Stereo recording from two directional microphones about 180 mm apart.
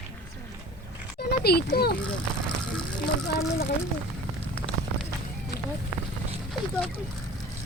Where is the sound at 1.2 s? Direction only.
60° left (ahead or behind).